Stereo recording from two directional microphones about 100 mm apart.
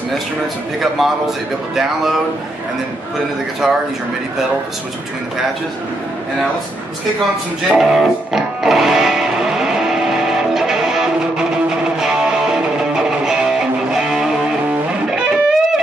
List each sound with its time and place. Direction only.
0.7 s a man's voice: centre (ahead or behind)
3.6 s a man's voice: 5° right (ahead or behind)
7.6 s music: 5° right (ahead or behind)